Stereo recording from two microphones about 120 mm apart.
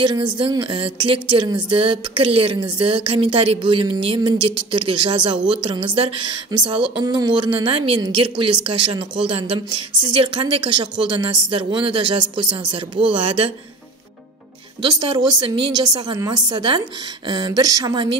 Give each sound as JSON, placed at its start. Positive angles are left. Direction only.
{"t": 0.0, "sound": "speech", "side_deg": -40}
{"t": 14.8, "sound": "a woman's voice", "side_deg": -40}